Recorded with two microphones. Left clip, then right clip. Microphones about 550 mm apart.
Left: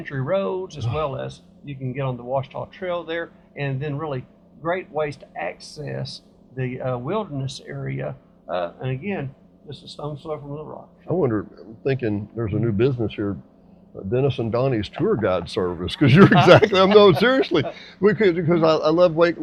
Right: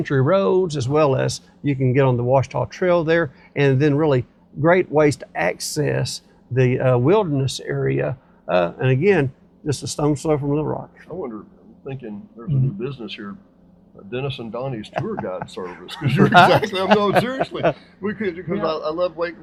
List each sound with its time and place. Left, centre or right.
0.0 s speech: right
11.1 s speech: left